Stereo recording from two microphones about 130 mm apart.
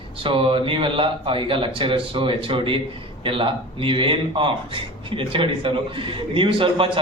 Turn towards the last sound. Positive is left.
turn(degrees=-40)  # may be behind; listen again after turning